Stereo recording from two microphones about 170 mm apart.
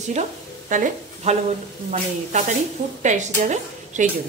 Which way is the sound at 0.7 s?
50° right (ahead or behind).